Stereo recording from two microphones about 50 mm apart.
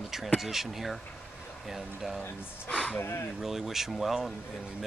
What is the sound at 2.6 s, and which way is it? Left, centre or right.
Speech, centre.